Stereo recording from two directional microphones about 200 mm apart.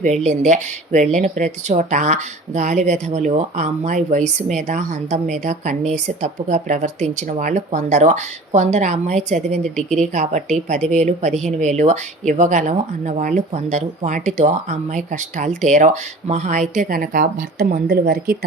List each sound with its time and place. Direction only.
0.0 s speech: 35° right (ahead or behind)